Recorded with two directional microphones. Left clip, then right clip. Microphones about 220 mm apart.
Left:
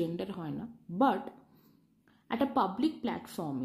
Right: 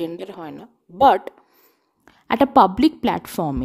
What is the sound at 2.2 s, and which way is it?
Speech, 40° right (ahead or behind).